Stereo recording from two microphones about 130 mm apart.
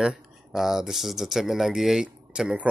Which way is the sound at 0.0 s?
Centre (ahead or behind).